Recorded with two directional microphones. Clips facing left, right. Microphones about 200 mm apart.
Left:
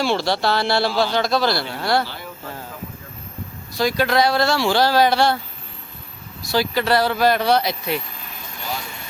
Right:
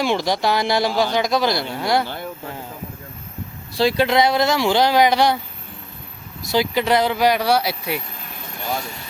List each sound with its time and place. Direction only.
0.0 s a man's voice: 15° right (ahead or behind)
3.8 s speech: 25° right (ahead or behind)
6.4 s a man's voice: 20° right (ahead or behind)